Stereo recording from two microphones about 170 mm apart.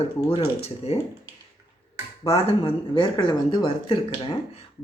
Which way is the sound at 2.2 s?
35° left (ahead or behind).